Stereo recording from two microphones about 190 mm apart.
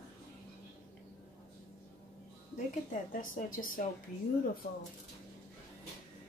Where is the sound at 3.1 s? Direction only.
45° left (ahead or behind).